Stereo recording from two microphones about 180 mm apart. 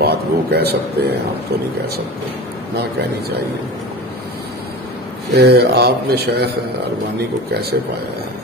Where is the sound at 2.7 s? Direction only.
65° right (ahead or behind).